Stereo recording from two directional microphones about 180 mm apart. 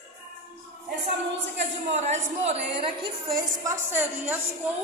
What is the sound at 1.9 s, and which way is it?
A woman's voice, 40° right (ahead or behind).